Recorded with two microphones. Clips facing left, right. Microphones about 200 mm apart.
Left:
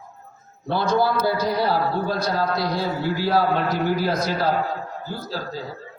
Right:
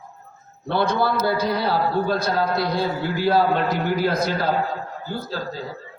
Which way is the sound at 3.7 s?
55° right (ahead or behind).